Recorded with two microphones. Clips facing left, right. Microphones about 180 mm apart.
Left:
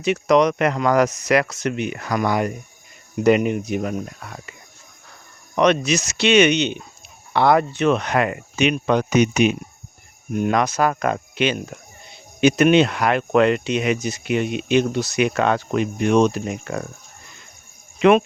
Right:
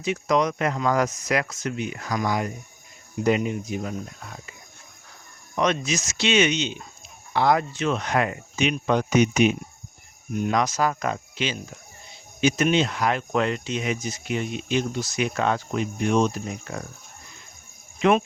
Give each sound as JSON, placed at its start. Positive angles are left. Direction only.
{"t": 0.0, "sound": "speech", "side_deg": 70}
{"t": 5.5, "sound": "speech", "side_deg": 70}
{"t": 10.3, "sound": "speech", "side_deg": 60}